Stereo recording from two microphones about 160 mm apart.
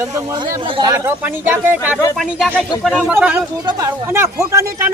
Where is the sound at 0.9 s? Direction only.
15° right (ahead or behind).